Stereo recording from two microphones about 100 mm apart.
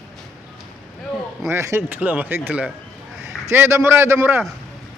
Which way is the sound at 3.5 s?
25° right (ahead or behind).